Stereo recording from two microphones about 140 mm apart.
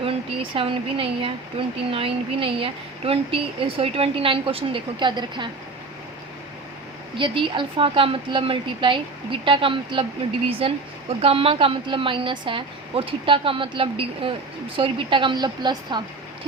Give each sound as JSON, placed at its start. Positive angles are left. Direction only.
{"t": 0.0, "sound": "speech", "side_deg": -40}
{"t": 7.2, "sound": "speech", "side_deg": -35}